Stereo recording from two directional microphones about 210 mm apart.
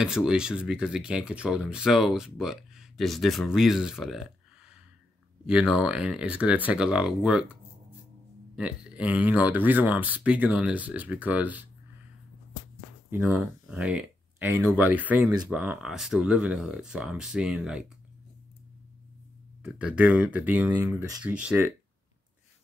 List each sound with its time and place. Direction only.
0.0 s speech: 5° right (ahead or behind)
8.5 s speech: 5° right (ahead or behind)
13.1 s speech: 5° right (ahead or behind)
19.6 s speech: 5° right (ahead or behind)